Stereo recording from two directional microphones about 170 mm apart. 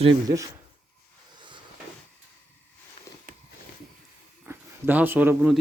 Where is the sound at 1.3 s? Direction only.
30° right (ahead or behind).